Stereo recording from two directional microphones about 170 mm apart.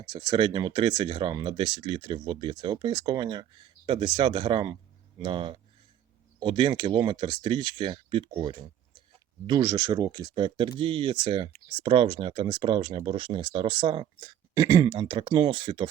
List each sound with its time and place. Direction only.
0.1 s speech: 25° right (ahead or behind)